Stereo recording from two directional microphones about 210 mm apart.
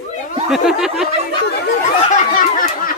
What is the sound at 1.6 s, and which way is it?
Chatter, 40° left (ahead or behind).